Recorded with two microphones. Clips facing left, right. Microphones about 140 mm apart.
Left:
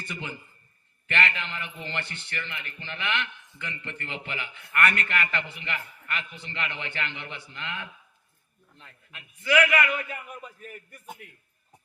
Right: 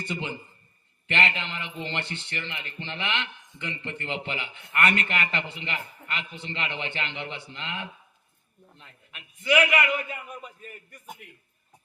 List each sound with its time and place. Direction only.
0.0 s a man's voice: 25° right (ahead or behind)